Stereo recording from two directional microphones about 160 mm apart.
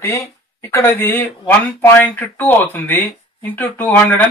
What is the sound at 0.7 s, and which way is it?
Speech, 15° left (ahead or behind).